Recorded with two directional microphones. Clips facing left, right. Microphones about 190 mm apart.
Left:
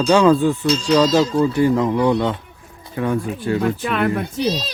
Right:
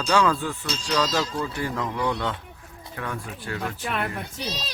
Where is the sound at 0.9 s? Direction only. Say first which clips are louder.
Left 9 dB; 25° left (ahead or behind).